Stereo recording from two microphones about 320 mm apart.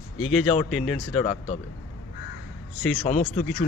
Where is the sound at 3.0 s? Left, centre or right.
Left.